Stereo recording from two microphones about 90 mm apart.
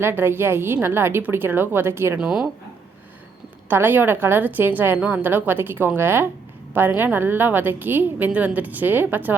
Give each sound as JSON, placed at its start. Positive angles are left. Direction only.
{"t": 0.0, "sound": "a woman's voice", "side_deg": -25}
{"t": 2.1, "sound": "speech", "side_deg": -5}
{"t": 3.7, "sound": "a woman's voice", "side_deg": -20}